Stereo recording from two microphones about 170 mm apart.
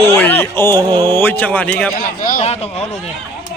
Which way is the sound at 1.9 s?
55° left (ahead or behind).